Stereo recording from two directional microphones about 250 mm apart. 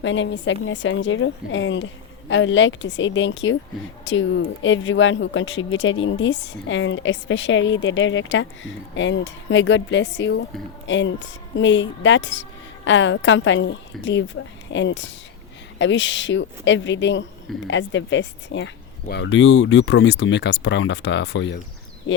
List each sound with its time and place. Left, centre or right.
0.0 s speech: left